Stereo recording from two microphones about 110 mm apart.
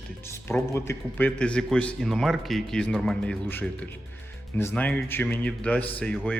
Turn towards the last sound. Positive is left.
turn(degrees=10)  # may be behind; listen again after turning